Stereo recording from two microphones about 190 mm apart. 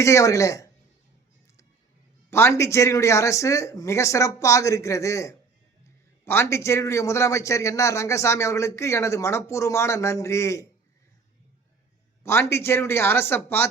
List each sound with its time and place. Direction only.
0.0 s a man's voice: 15° left (ahead or behind)
2.3 s a man's voice: 15° left (ahead or behind)
12.2 s a man's voice: 15° left (ahead or behind)